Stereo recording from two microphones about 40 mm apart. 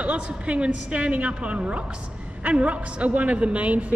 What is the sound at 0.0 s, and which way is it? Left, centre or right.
A woman's voice, right.